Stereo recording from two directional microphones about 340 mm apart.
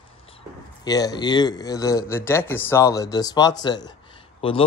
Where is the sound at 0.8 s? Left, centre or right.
Centre.